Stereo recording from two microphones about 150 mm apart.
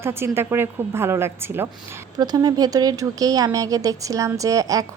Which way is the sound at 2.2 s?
25° right (ahead or behind).